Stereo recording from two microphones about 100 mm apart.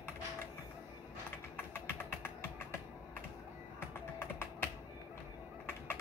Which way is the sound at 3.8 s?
25° left (ahead or behind).